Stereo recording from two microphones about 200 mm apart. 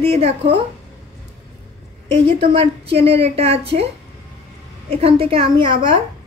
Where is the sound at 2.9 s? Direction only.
30° right (ahead or behind).